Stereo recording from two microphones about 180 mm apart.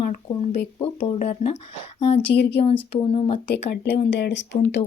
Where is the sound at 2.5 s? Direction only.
30° left (ahead or behind).